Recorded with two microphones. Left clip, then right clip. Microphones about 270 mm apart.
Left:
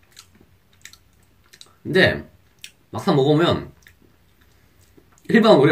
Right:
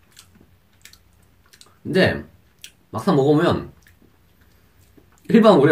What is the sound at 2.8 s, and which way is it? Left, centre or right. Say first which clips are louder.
Speech: right 1 dB; centre.